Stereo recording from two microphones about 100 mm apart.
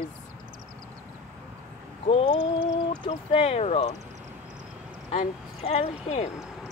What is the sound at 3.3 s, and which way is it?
Speech, 80° left.